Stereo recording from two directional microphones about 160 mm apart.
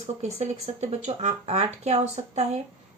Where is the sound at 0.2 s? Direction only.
45° right (ahead or behind).